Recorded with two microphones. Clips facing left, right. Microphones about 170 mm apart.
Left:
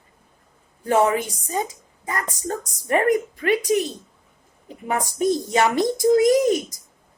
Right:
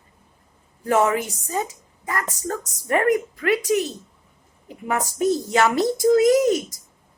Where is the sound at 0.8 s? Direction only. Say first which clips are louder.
Left 1 dB; 25° left (ahead or behind).